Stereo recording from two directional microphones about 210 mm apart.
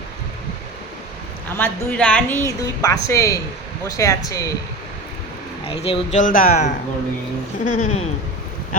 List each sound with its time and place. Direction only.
1.5 s a woman's voice: 5° left (ahead or behind)
5.6 s speech: 25° left (ahead or behind)
6.1 s speech: 40° left (ahead or behind)